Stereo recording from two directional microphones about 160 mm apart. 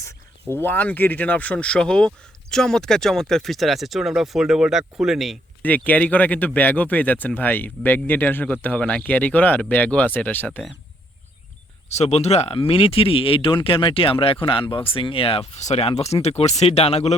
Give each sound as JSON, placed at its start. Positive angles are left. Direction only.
{"t": 0.5, "sound": "speech", "side_deg": 10}
{"t": 5.6, "sound": "speech", "side_deg": 10}
{"t": 11.9, "sound": "speech", "side_deg": 45}